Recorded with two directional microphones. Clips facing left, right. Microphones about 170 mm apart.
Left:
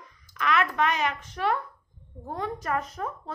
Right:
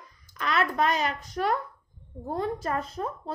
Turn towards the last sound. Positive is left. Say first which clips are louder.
# even
turn(degrees=-30)  # may be behind; listen again after turning